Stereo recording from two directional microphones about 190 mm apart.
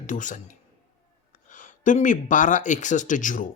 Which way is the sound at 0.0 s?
40° left (ahead or behind).